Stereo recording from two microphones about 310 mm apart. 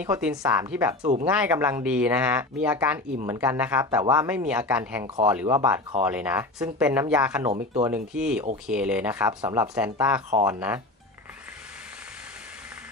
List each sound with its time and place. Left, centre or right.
0.0 s speech: centre
5.0 s speech: centre
7.5 s speech: centre
7.9 s speech: centre